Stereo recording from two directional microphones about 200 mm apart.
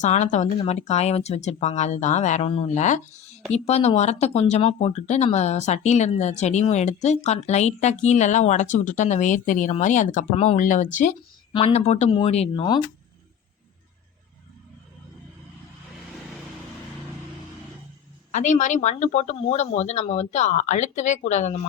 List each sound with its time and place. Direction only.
0.0 s speech: 35° left (ahead or behind)
18.3 s speech: 35° left (ahead or behind)